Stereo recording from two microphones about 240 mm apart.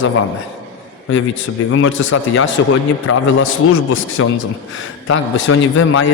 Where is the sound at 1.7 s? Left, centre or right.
Left.